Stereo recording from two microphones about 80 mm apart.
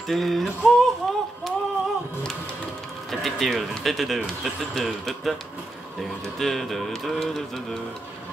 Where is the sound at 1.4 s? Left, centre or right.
Centre.